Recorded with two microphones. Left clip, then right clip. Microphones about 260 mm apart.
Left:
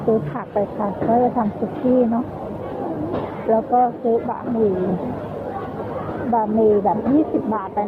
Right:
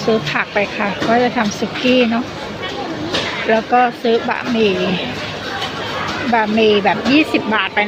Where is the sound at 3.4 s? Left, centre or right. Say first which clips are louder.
Right 3 dB; right.